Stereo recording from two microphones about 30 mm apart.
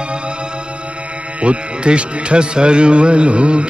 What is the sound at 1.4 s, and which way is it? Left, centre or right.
Speech, right.